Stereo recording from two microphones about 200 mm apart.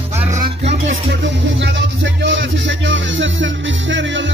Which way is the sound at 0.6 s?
35° right (ahead or behind).